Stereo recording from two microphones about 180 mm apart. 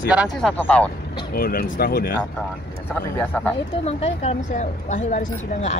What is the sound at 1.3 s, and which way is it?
Speech, 55° left (ahead or behind).